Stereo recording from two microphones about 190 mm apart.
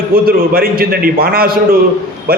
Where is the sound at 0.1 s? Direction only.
50° right (ahead or behind).